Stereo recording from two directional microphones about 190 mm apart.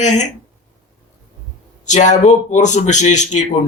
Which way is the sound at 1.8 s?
40° left (ahead or behind).